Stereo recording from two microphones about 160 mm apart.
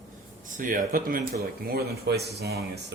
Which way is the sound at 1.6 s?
75° right (ahead or behind).